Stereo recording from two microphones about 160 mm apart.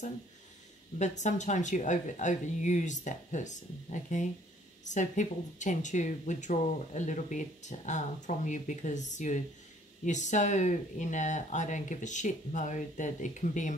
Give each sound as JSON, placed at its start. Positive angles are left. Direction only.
{"t": 0.9, "sound": "speech", "side_deg": 50}